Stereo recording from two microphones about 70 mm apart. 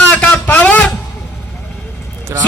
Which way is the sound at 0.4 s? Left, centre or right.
Left.